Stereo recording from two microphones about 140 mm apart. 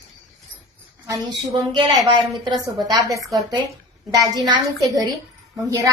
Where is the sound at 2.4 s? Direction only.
30° right (ahead or behind).